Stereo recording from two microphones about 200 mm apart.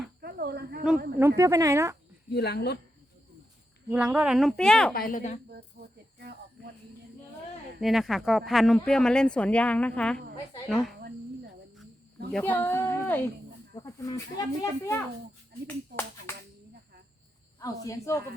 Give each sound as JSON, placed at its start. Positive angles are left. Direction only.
{"t": 0.2, "sound": "cricket", "side_deg": -50}
{"t": 1.4, "sound": "speech", "side_deg": -15}
{"t": 2.3, "sound": "speech", "side_deg": 55}
{"t": 3.8, "sound": "speech", "side_deg": -10}
{"t": 4.9, "sound": "a woman's voice", "side_deg": 45}
{"t": 7.8, "sound": "speech", "side_deg": 0}
{"t": 12.3, "sound": "speech", "side_deg": 10}
{"t": 17.6, "sound": "speech", "side_deg": 15}